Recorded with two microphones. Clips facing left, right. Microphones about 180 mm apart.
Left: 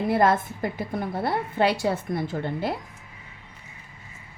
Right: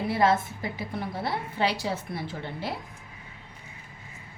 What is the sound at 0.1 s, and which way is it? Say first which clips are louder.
A woman's voice: left 2 dB; 55° left (ahead or behind).